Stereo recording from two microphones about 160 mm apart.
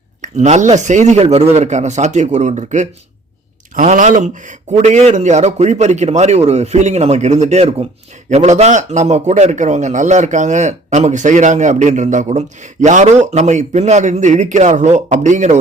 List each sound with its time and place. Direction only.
0.2 s a man's voice: 45° right (ahead or behind)